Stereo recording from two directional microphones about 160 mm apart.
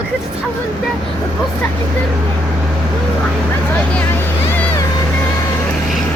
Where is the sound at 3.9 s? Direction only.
10° left (ahead or behind).